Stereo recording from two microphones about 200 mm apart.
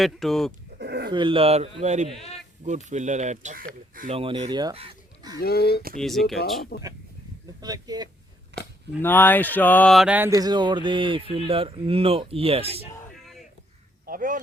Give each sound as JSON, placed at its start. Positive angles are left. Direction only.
{"t": 0.0, "sound": "speech", "side_deg": 0}
{"t": 0.8, "sound": "a sound", "side_deg": -55}
{"t": 1.1, "sound": "mantra", "side_deg": -25}
{"t": 2.6, "sound": "speech", "side_deg": -35}
{"t": 4.1, "sound": "speech", "side_deg": -30}
{"t": 5.4, "sound": "speech", "side_deg": 50}
{"t": 6.0, "sound": "speech", "side_deg": 0}
{"t": 6.7, "sound": "speech", "side_deg": 50}
{"t": 7.6, "sound": "mantra", "side_deg": -20}
{"t": 8.5, "sound": "a sound", "side_deg": -60}
{"t": 9.0, "sound": "mantra", "side_deg": 10}
{"t": 14.0, "sound": "speech", "side_deg": -45}